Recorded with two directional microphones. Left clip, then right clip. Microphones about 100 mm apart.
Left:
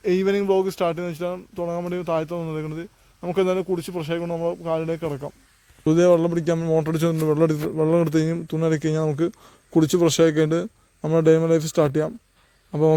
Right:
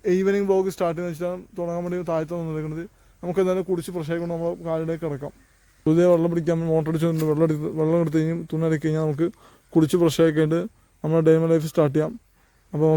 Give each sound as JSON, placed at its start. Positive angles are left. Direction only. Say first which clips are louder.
{"t": 0.0, "sound": "speech", "louder": "even", "side_deg": 40}
{"t": 3.3, "sound": "speech", "louder": "left 1 dB", "side_deg": 30}
{"t": 5.8, "sound": "speech", "louder": "left 1 dB", "side_deg": 0}